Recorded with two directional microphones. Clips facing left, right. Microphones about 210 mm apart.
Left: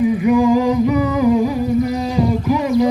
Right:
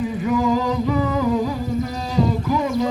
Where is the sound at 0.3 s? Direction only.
10° left (ahead or behind).